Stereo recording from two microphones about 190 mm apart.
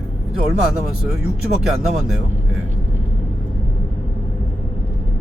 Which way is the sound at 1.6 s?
Centre (ahead or behind).